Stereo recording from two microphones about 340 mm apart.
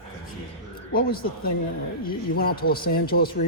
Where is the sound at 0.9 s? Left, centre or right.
Left.